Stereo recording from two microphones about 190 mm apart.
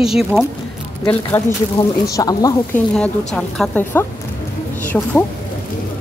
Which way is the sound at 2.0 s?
20° left (ahead or behind).